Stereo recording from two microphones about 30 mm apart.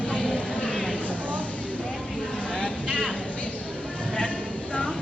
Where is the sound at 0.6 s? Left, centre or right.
Centre.